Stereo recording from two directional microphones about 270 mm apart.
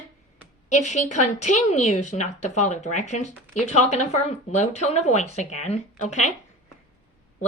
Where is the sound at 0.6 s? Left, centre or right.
Left.